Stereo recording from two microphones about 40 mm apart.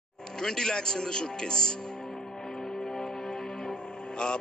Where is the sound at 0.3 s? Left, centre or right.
Centre.